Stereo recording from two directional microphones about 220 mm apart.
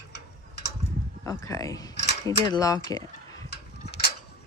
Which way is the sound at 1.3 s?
15° left (ahead or behind).